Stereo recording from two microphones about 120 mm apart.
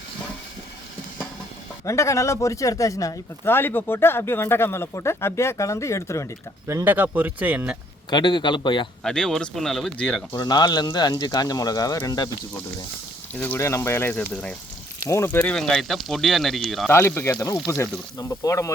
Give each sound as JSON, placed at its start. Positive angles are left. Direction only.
{"t": 1.8, "sound": "a man's voice", "side_deg": 25}
{"t": 6.7, "sound": "speech", "side_deg": -20}
{"t": 8.1, "sound": "speech", "side_deg": 40}
{"t": 9.0, "sound": "speech", "side_deg": 5}
{"t": 10.3, "sound": "speech", "side_deg": 35}
{"t": 13.4, "sound": "a man's voice", "side_deg": 20}
{"t": 15.5, "sound": "speech", "side_deg": 5}
{"t": 16.9, "sound": "a man's voice", "side_deg": 20}